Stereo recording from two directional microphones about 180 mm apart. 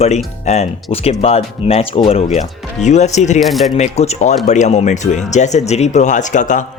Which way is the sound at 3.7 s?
35° left (ahead or behind).